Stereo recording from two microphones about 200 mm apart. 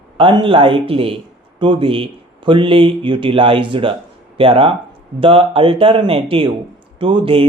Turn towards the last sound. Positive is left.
turn(degrees=-25)  # may be behind; listen again after turning